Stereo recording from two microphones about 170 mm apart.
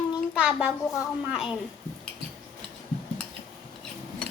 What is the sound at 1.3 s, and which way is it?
Speech, 5° right (ahead or behind).